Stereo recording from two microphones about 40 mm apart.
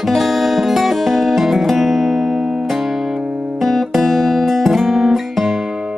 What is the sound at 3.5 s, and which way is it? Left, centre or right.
Guitar, centre.